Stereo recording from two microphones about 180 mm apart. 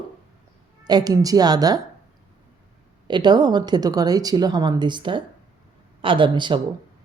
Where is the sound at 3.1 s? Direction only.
25° right (ahead or behind).